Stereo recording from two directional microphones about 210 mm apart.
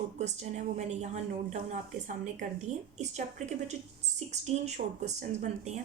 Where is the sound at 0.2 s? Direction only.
35° right (ahead or behind).